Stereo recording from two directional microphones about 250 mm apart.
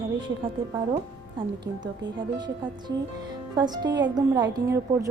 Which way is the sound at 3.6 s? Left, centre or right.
Centre.